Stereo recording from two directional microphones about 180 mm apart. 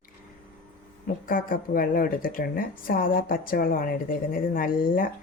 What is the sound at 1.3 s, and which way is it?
Speech, 50° left (ahead or behind).